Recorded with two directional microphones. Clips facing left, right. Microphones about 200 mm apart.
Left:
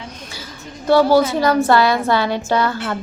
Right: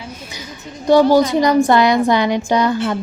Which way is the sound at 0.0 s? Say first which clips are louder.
Right 2 dB; 10° right (ahead or behind).